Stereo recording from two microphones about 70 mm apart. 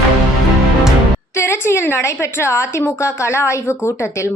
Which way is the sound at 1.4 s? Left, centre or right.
Left.